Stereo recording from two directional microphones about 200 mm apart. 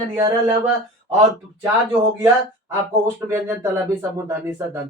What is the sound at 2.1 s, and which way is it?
Speech, 15° right (ahead or behind).